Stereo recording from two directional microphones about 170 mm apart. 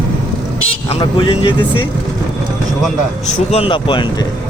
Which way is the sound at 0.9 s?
30° left (ahead or behind).